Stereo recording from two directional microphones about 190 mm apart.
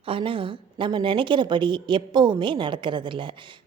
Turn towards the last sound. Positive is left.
turn(degrees=-25)  # may be behind; listen again after turning